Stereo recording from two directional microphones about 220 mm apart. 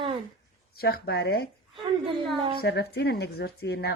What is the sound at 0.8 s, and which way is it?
Speech, 45° left (ahead or behind).